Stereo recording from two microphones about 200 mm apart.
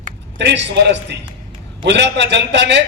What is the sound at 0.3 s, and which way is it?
A man's voice, 60° right (ahead or behind).